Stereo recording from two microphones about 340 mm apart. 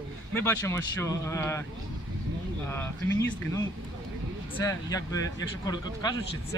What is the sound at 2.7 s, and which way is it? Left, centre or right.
Speech, centre.